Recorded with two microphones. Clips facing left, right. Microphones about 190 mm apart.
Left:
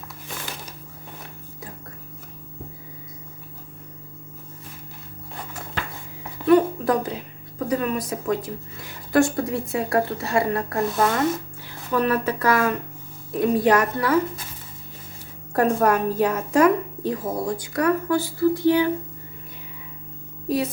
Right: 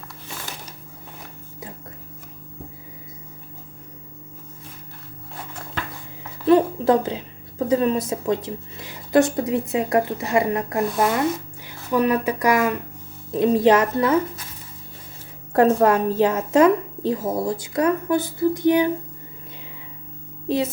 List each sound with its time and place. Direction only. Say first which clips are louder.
6.4 s a woman's voice: right 1 dB; 25° right (ahead or behind)
15.5 s a woman's voice: right 3 dB; 25° right (ahead or behind)